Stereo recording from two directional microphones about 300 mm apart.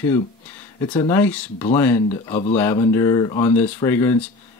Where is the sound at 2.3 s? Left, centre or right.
Left.